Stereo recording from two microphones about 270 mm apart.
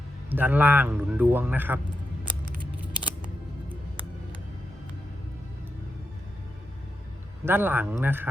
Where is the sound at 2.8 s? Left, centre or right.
Centre.